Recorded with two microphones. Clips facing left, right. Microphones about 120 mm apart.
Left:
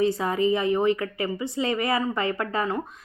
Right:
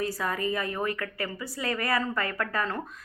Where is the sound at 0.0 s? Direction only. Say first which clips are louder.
Left 7 dB; 25° left (ahead or behind).